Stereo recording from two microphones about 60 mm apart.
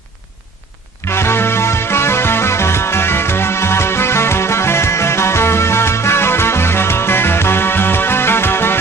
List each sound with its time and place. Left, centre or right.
1.1 s music: left